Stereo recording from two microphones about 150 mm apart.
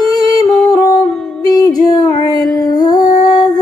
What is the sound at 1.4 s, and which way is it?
Music, 25° left (ahead or behind).